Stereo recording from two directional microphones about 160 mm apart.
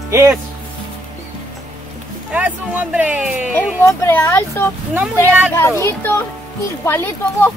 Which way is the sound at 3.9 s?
15° left (ahead or behind).